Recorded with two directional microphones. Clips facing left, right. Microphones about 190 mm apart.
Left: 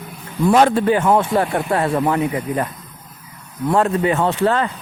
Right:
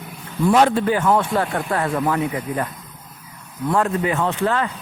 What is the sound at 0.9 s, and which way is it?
Speech, 20° left (ahead or behind).